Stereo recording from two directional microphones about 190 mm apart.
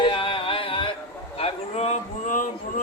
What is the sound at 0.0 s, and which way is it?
Music, 25° left (ahead or behind).